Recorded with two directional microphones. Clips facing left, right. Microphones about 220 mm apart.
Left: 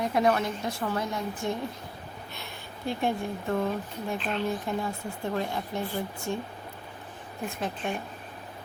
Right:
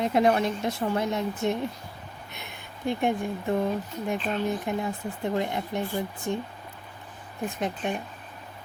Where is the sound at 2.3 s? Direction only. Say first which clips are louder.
Left 1 dB; 20° right (ahead or behind).